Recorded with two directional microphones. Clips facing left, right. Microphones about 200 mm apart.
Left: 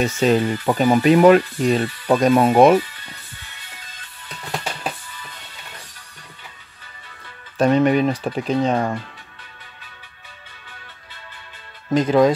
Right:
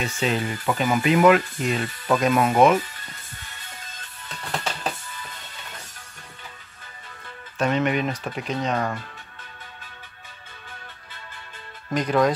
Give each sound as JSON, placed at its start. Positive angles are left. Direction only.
{"t": 0.0, "sound": "speech", "side_deg": 40}
{"t": 7.5, "sound": "speech", "side_deg": 35}
{"t": 11.9, "sound": "speech", "side_deg": 25}